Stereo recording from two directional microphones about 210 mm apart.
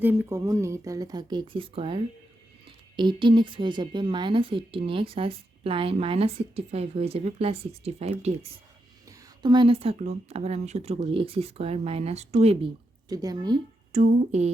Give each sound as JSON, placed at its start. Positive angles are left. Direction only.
{"t": 0.0, "sound": "a woman's voice", "side_deg": -10}
{"t": 13.9, "sound": "speech", "side_deg": -35}